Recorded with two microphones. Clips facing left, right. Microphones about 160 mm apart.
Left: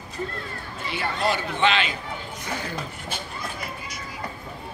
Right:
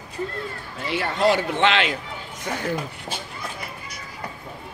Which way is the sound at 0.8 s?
90° right.